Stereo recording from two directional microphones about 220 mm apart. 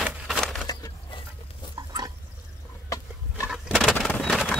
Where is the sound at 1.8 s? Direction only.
15° right (ahead or behind).